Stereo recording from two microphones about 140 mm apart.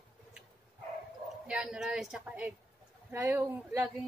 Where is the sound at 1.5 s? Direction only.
5° right (ahead or behind).